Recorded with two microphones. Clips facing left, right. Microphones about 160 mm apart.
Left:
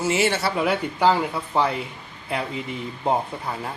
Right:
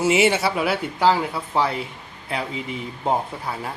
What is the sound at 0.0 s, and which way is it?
Speech, 15° right (ahead or behind).